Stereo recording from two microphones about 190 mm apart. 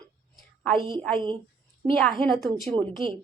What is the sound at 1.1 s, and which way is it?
Speech, 25° right (ahead or behind).